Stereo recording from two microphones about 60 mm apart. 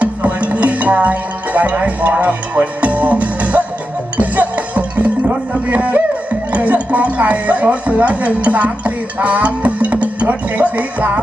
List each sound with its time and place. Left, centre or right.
0.0 s music: right
6.5 s speech: right